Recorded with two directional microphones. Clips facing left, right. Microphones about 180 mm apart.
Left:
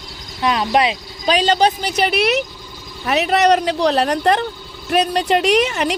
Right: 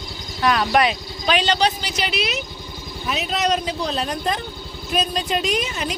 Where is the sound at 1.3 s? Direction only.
40° left (ahead or behind).